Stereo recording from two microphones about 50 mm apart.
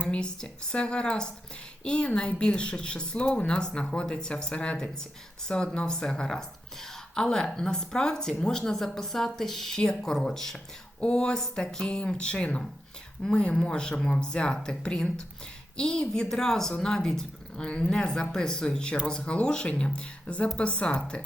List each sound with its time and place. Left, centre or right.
0.1 s speech: centre